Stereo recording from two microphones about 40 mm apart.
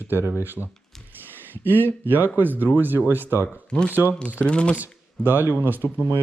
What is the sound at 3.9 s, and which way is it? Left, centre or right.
Speech, right.